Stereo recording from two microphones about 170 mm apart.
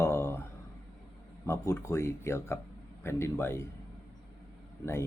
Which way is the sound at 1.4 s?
15° left (ahead or behind).